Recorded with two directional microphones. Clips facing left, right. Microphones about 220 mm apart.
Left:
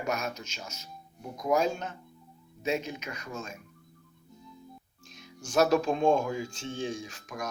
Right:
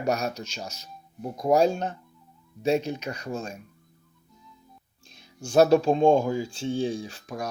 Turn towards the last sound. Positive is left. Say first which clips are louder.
# right 5 dB
turn(degrees=-35)  # may be behind; listen again after turning